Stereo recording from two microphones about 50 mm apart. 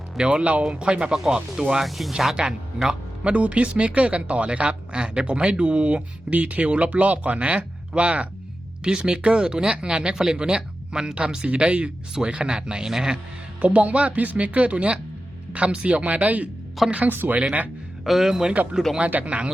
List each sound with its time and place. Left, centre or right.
0.2 s a man's voice: right; by 2.3 s centre
2.3 s a man's voice: centre
13.6 s a man's voice: right
18.0 s speech: centre
18.9 s a man's voice: right